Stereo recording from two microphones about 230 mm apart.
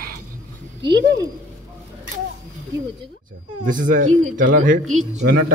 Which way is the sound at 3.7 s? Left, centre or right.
Right.